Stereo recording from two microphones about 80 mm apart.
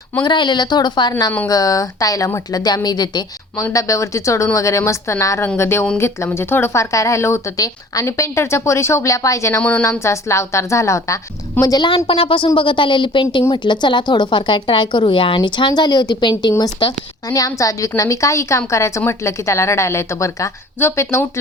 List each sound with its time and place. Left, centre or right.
0.2 s speech: left
1.5 s speech: left
3.6 s speech: left
9.6 s a woman's voice: centre
10.0 s speech: left
11.6 s a woman's voice: left
12.5 s a woman's voice: left
13.5 s speech: left